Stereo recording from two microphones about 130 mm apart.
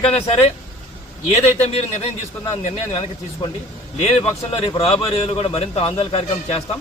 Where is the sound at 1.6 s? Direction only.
50° left (ahead or behind).